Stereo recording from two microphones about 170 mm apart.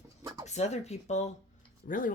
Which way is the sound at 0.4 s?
40° left (ahead or behind).